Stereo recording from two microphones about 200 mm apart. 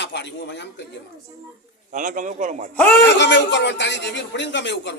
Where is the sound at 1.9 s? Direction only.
40° right (ahead or behind).